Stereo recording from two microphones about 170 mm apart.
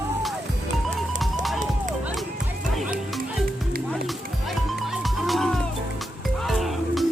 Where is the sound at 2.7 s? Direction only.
5° right (ahead or behind).